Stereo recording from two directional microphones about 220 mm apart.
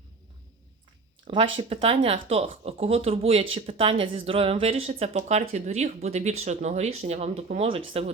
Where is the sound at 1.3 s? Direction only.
25° right (ahead or behind).